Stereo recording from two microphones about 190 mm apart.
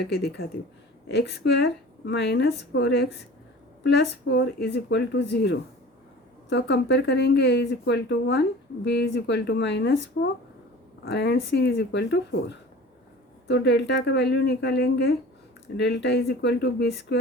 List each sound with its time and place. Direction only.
0.1 s speech: 60° left (ahead or behind)
11.0 s speech: 60° left (ahead or behind)